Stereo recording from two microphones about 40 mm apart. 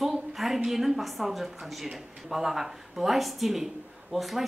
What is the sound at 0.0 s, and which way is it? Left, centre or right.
A woman's voice, centre.